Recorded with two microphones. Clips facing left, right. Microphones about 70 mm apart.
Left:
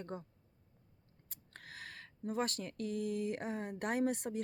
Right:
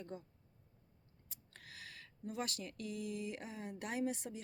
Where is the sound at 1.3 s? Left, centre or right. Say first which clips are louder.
Left 5 dB; left.